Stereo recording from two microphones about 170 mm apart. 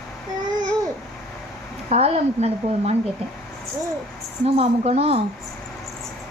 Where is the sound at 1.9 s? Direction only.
40° right (ahead or behind).